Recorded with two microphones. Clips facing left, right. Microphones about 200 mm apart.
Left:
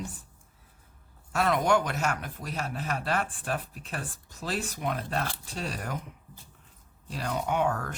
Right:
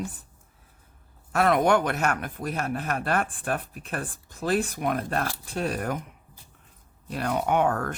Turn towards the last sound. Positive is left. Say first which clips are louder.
# right 4 dB
turn(degrees=-55)  # may be behind; listen again after turning